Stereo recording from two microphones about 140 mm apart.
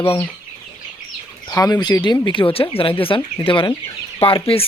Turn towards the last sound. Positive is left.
turn(degrees=40)  # may be behind; listen again after turning